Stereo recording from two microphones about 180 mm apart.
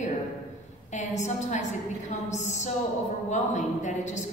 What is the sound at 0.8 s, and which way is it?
A woman's voice, 40° left (ahead or behind).